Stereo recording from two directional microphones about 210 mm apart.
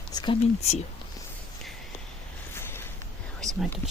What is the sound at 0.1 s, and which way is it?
Speech, 20° left (ahead or behind).